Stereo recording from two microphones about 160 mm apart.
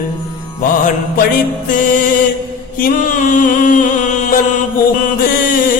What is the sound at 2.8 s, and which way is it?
Mantra, 55° left (ahead or behind).